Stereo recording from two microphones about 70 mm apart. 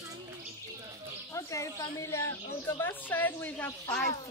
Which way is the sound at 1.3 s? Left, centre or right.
Left.